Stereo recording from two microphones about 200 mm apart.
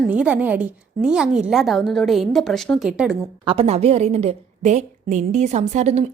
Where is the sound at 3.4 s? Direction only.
30° right (ahead or behind).